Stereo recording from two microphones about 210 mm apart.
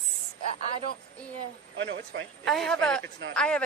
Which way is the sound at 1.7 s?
60° right (ahead or behind).